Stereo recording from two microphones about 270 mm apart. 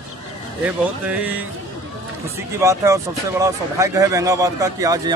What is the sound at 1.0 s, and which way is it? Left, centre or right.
Speech, centre.